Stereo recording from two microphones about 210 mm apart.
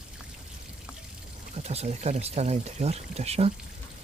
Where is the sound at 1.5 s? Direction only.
30° right (ahead or behind).